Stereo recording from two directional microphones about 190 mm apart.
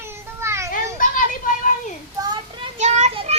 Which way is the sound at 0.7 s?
45° left (ahead or behind).